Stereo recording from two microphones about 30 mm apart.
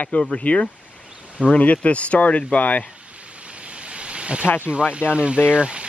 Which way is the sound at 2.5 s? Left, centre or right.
Left.